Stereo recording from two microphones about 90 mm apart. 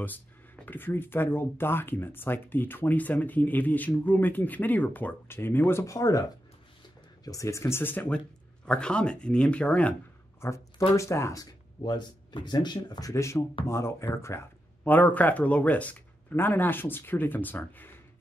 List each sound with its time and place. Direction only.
0.7 s speech: 25° left (ahead or behind); by 6.2 s 40° left (ahead or behind)
7.2 s speech: 35° left (ahead or behind); by 9.9 s 15° left (ahead or behind)
10.4 s speech: 30° left (ahead or behind)
11.8 s speech: 55° left (ahead or behind)
13.1 s speech: 35° left (ahead or behind)
14.9 s speech: 20° left (ahead or behind)